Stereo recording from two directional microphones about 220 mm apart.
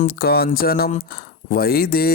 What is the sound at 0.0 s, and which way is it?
Speech, 45° left (ahead or behind).